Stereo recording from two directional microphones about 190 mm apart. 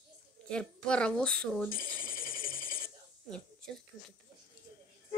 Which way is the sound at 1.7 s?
50° left (ahead or behind).